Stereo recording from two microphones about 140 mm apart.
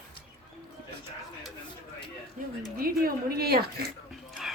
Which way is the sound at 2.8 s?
90° right.